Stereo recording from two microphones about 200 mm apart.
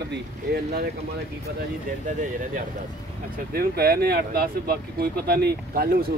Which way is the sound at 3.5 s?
50° right (ahead or behind).